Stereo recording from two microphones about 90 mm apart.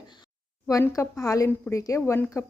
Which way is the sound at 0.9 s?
35° left (ahead or behind).